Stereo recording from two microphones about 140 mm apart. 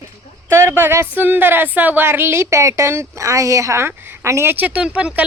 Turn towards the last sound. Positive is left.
turn(degrees=-10)  # may be behind; listen again after turning